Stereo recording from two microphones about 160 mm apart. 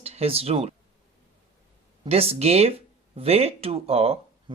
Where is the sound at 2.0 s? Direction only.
40° right (ahead or behind).